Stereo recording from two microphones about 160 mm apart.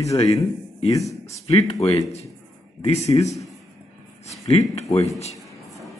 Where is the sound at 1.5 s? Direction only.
40° left (ahead or behind).